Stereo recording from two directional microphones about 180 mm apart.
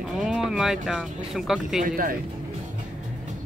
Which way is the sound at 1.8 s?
50° right (ahead or behind).